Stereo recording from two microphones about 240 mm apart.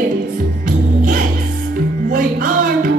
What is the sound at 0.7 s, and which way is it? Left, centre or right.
Music, right.